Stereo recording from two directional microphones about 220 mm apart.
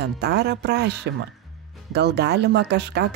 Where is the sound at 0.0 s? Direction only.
50° right (ahead or behind).